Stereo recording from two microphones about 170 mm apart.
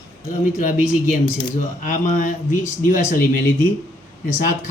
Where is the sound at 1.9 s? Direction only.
50° left (ahead or behind).